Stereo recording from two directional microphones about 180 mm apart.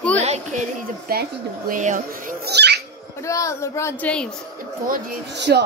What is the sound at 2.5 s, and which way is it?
Owl, 70° right (ahead or behind).